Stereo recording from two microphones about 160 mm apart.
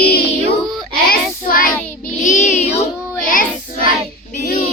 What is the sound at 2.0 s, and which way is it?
Child singing, 50° left (ahead or behind).